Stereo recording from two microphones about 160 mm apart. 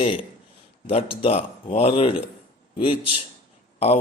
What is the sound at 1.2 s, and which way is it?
Speech, 40° left (ahead or behind).